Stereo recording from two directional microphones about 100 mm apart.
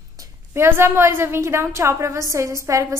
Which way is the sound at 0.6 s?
25° right (ahead or behind).